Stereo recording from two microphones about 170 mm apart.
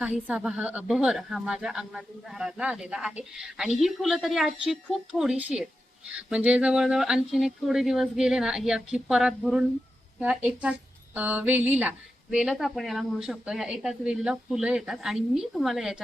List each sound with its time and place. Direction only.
0.0 s a woman's voice: 10° right (ahead or behind)